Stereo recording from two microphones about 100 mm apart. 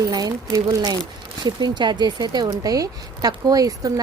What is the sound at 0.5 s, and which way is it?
Speech, 35° right (ahead or behind).